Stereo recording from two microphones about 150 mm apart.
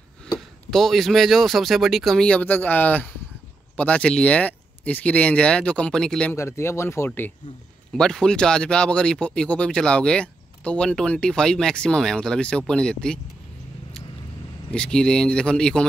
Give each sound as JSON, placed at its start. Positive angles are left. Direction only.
{"t": 0.7, "sound": "speech", "side_deg": 0}
{"t": 6.3, "sound": "speech", "side_deg": 20}
{"t": 14.7, "sound": "speech", "side_deg": 5}